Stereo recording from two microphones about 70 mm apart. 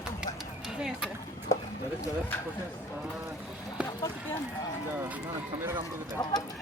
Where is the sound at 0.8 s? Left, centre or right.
Centre.